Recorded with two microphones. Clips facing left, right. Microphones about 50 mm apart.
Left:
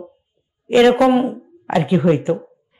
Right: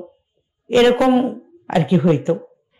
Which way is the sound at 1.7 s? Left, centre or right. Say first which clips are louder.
Even; centre.